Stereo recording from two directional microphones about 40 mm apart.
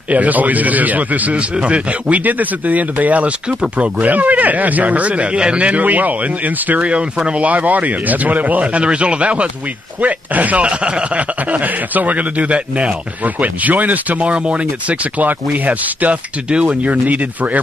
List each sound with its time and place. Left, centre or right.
0.1 s a man's voice: right
11.5 s a man's voice: right
13.2 s speech: right
14.2 s a man's voice: right
16.4 s a man's voice: right